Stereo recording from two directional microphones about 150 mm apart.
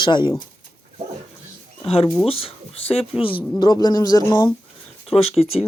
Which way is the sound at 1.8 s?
40° left (ahead or behind).